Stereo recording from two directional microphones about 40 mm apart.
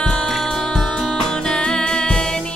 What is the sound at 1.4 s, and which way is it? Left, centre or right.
Music, centre.